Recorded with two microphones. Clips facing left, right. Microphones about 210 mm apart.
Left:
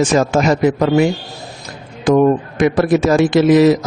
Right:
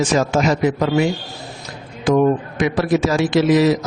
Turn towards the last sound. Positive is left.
turn(degrees=55)  # may be behind; listen again after turning